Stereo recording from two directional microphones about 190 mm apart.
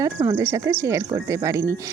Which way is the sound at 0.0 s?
20° right (ahead or behind).